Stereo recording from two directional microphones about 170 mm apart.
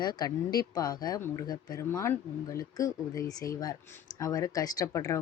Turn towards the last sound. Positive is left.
turn(degrees=20)  # may be behind; listen again after turning